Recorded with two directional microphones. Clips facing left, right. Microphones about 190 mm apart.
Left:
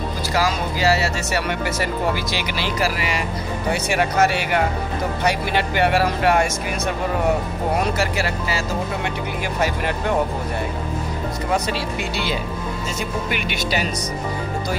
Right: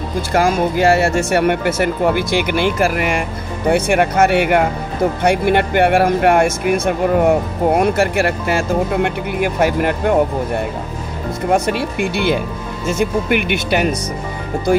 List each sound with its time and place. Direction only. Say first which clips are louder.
0.3 s speech: right 7 dB; 50° right (ahead or behind)
11.4 s speech: right 7 dB; 55° right (ahead or behind)